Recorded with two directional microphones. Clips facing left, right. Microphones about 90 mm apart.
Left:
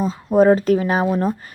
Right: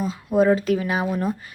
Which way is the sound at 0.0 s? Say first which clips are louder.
Left 5 dB; 35° left (ahead or behind).